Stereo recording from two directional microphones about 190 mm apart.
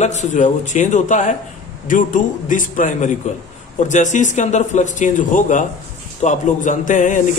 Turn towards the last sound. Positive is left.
turn(degrees=40)  # may be behind; listen again after turning